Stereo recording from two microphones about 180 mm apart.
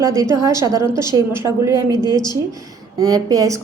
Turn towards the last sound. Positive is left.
turn(degrees=-20)  # may be behind; listen again after turning